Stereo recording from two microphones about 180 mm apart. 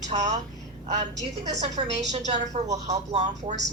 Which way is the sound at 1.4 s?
40° right (ahead or behind).